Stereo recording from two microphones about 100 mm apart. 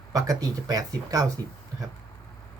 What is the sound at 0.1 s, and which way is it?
Speech, 35° right (ahead or behind).